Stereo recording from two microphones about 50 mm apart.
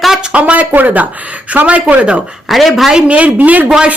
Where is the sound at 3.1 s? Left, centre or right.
Right.